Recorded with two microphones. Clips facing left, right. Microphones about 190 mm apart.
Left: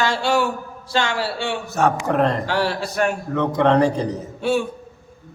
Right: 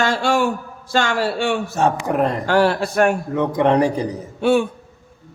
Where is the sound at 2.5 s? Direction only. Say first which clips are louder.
Right 6 dB; 55° right (ahead or behind).